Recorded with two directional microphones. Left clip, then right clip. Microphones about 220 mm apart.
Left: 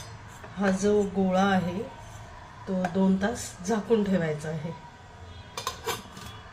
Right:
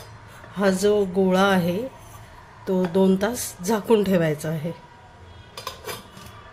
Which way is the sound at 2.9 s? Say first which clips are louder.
Right 8 dB; 50° right (ahead or behind).